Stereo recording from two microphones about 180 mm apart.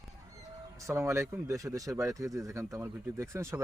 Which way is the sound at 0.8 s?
15° right (ahead or behind).